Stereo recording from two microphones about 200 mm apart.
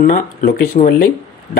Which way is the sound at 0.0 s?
45° left (ahead or behind).